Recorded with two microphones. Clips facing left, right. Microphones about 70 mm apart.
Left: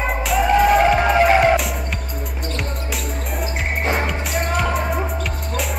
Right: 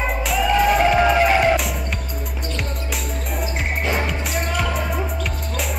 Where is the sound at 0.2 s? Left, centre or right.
Centre.